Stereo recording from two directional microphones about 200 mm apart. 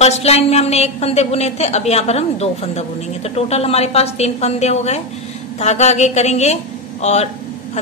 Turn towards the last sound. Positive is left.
turn(degrees=35)  # may be behind; listen again after turning